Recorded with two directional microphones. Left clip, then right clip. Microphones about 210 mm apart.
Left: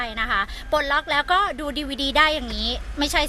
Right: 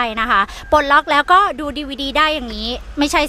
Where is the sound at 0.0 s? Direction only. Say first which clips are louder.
Right 8 dB; 35° right (ahead or behind).